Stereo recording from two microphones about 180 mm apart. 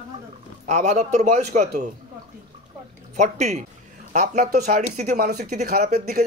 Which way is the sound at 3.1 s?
40° right (ahead or behind).